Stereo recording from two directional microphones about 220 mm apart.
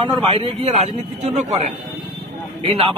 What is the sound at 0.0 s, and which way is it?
A man's voice, 25° right (ahead or behind).